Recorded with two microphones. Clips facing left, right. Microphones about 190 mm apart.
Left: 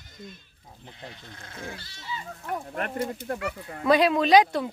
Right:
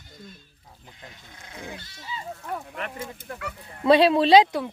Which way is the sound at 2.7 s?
50° left (ahead or behind).